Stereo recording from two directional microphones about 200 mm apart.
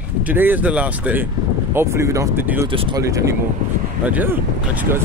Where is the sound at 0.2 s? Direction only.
10° right (ahead or behind).